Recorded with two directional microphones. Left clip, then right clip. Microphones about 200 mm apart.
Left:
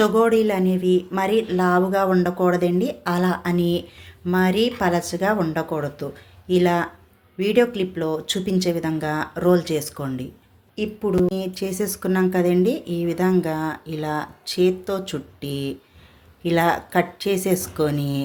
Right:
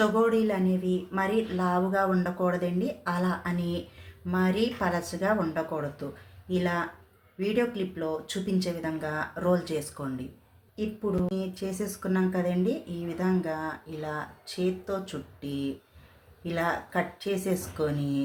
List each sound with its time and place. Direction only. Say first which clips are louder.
0.0 s speech: left 7 dB; 40° left (ahead or behind)